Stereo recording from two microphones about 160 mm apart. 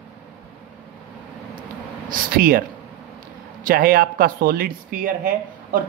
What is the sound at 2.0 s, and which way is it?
Speech, 60° right (ahead or behind).